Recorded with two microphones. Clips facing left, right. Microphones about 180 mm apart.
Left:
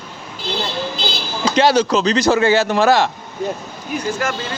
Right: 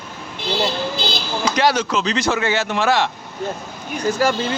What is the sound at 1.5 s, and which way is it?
Speech, 30° left (ahead or behind).